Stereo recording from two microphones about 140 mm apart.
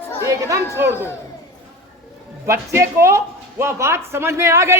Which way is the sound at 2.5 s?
20° right (ahead or behind).